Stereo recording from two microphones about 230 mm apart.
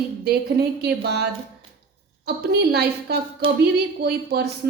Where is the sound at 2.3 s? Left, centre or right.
Right.